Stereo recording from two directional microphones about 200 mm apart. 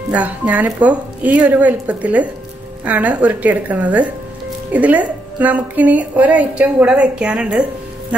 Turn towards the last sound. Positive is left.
turn(degrees=-5)  # may be behind; listen again after turning